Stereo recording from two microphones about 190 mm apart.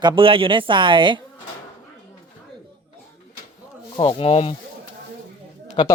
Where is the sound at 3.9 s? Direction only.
30° left (ahead or behind).